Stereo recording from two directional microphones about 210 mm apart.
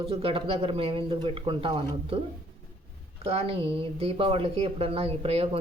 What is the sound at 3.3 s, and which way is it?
Speech, 30° right (ahead or behind).